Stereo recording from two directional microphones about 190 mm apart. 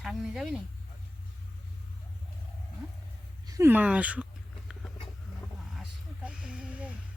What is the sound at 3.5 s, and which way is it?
Speech, 15° right (ahead or behind).